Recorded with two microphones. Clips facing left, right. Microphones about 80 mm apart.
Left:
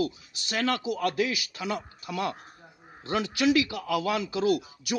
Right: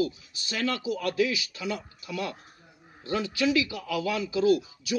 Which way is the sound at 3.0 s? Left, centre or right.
Left.